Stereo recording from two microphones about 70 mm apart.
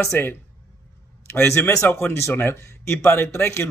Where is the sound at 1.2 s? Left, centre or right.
Left.